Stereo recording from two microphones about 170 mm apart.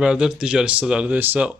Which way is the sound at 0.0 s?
5° right (ahead or behind).